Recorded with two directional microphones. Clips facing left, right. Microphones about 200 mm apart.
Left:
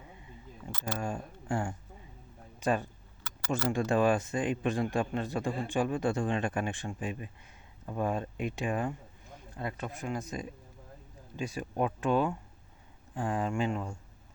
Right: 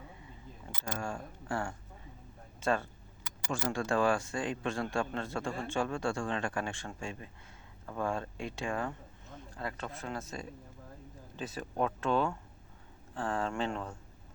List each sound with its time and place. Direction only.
0.9 s a man's voice: 20° left (ahead or behind)